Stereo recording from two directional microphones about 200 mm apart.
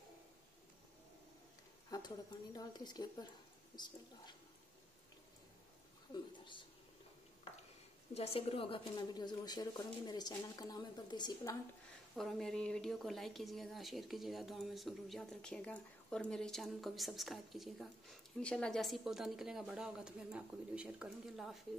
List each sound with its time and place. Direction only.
1.9 s a woman's voice: 20° left (ahead or behind)
6.1 s a sound: 25° left (ahead or behind)
8.1 s a woman's voice: 30° left (ahead or behind)
12.2 s a woman's voice: centre (ahead or behind)